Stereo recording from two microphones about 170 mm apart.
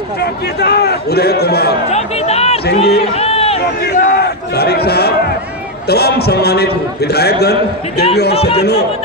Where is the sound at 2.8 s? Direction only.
35° left (ahead or behind).